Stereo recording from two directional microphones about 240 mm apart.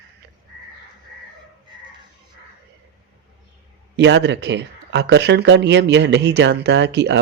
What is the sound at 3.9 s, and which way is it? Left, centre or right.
Speech, right.